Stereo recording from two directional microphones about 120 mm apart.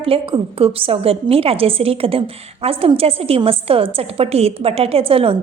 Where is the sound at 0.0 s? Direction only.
50° right (ahead or behind).